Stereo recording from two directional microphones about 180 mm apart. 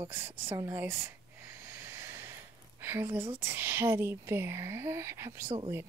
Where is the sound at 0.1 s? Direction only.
15° right (ahead or behind).